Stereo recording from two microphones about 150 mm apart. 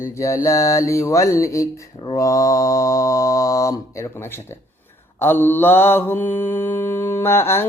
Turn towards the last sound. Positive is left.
turn(degrees=15)  # may be behind; listen again after turning